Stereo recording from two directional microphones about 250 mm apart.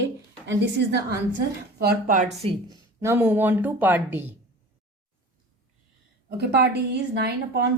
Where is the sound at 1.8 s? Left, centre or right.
Right.